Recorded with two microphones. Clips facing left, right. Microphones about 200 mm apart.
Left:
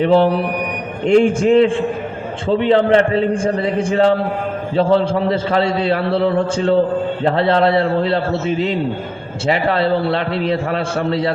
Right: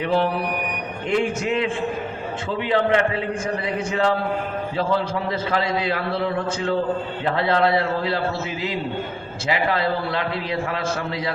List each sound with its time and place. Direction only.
0.0 s a man's voice: 35° left (ahead or behind)